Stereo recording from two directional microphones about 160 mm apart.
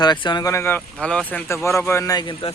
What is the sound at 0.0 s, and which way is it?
Speech, 30° left (ahead or behind).